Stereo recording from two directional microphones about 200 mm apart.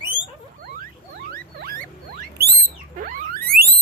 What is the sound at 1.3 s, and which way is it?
Rodents, 45° right (ahead or behind).